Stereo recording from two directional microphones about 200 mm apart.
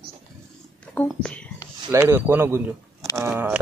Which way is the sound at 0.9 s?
5° left (ahead or behind).